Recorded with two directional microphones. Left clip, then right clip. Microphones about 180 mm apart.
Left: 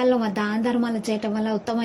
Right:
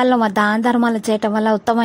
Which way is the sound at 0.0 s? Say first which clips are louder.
Right 7 dB; 50° right (ahead or behind).